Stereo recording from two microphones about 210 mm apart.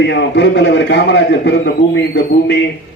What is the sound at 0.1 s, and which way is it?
A man's voice, 55° left (ahead or behind).